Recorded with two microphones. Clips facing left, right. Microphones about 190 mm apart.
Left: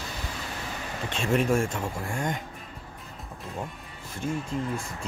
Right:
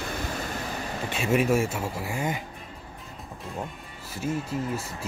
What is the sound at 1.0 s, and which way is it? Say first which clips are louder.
Speech: right 1 dB; 5° right (ahead or behind).